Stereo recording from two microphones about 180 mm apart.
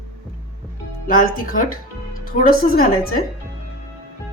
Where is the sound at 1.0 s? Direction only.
50° left (ahead or behind).